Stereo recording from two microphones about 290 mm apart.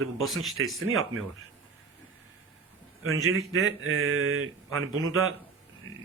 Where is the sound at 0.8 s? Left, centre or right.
Right.